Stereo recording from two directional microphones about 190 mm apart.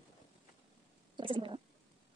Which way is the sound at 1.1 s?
25° right (ahead or behind).